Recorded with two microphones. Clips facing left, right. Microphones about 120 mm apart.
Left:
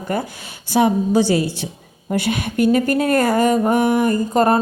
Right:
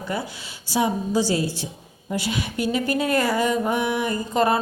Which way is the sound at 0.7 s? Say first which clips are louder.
Left 6 dB; 60° left (ahead or behind).